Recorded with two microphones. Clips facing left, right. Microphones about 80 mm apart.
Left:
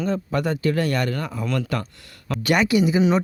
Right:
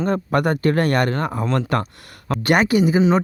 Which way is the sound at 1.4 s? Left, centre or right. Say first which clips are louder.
Right 2 dB; right.